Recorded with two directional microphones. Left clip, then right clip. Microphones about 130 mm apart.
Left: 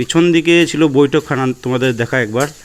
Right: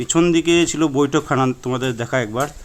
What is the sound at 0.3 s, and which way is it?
Speech, 20° left (ahead or behind).